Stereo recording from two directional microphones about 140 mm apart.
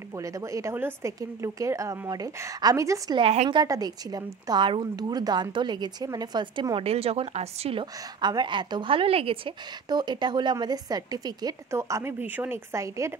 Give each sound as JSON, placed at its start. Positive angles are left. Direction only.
{"t": 0.2, "sound": "speech", "side_deg": -25}
{"t": 3.2, "sound": "a woman's voice", "side_deg": -45}
{"t": 3.4, "sound": "a woman's voice", "side_deg": -30}
{"t": 7.8, "sound": "a woman's voice", "side_deg": -30}